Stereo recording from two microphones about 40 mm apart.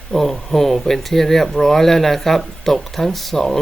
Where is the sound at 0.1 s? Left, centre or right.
Centre.